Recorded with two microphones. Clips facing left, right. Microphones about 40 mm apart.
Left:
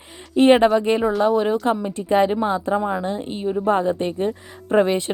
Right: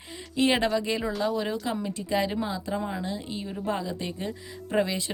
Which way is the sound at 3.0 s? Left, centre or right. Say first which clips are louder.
Left 8 dB; left.